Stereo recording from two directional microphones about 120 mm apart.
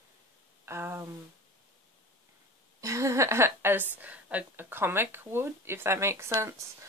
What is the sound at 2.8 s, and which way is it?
Speech, 25° right (ahead or behind).